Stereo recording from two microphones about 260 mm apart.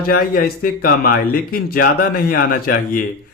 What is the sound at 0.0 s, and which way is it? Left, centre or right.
Speech, left.